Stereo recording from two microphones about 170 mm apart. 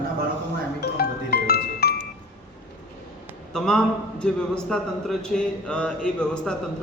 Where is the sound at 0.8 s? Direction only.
65° left (ahead or behind).